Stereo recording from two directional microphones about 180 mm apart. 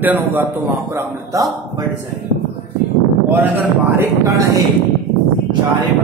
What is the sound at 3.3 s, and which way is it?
Speech, 15° right (ahead or behind).